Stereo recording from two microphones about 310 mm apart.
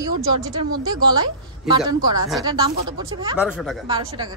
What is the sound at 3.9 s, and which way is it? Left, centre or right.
Speech, centre.